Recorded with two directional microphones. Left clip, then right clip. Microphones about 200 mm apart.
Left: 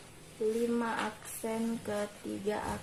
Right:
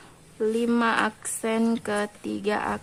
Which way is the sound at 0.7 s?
45° right (ahead or behind).